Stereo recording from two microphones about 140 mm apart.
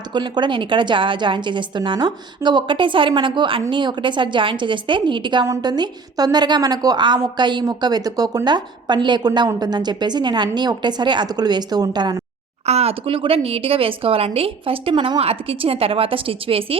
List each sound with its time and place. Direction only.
0.1 s a woman's voice: 35° right (ahead or behind)
12.6 s speech: 50° right (ahead or behind)